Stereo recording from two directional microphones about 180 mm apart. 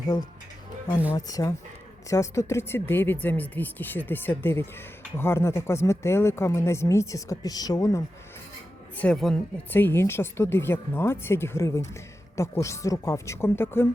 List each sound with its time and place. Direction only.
1.1 s speech: 20° left (ahead or behind)
9.0 s speech: 5° left (ahead or behind)